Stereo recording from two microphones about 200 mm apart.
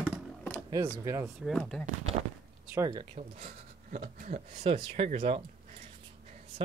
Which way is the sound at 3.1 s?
35° right (ahead or behind).